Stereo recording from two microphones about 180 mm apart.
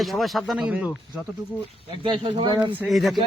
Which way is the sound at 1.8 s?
30° right (ahead or behind).